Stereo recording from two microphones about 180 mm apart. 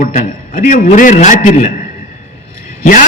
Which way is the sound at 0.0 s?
40° left (ahead or behind).